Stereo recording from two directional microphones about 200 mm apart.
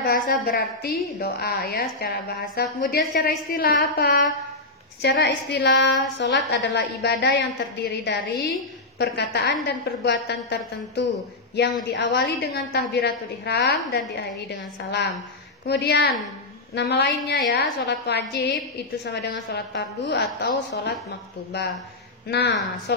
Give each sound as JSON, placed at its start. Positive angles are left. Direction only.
{"t": 0.0, "sound": "a woman's voice", "side_deg": 50}